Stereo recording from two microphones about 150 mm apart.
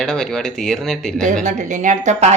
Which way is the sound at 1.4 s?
55° right (ahead or behind).